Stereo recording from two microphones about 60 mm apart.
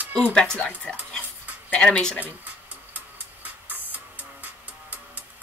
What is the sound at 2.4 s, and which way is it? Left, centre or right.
Music, right.